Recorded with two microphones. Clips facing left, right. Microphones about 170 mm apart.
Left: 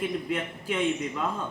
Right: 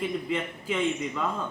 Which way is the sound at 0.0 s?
5° left (ahead or behind).